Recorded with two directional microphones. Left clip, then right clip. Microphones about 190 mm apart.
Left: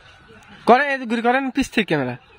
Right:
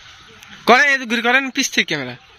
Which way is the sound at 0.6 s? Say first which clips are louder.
Right 3 dB; 15° left (ahead or behind).